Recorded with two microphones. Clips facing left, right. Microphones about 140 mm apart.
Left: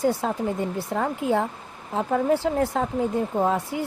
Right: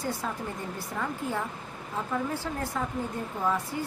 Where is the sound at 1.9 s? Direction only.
60° left (ahead or behind).